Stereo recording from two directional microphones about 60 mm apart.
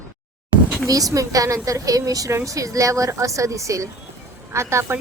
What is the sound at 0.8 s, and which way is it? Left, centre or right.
A woman's voice, right.